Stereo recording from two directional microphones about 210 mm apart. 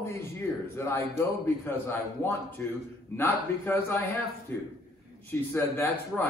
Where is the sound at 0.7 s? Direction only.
15° left (ahead or behind).